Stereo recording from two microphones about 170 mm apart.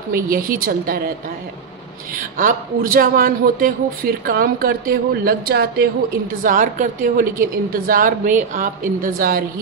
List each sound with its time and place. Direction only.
0.1 s speech: 60° right (ahead or behind)
2.1 s speech: 55° right (ahead or behind)
6.4 s speech: 50° right (ahead or behind)